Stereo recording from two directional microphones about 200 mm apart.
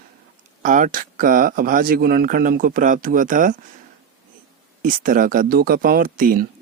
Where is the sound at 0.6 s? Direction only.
40° right (ahead or behind).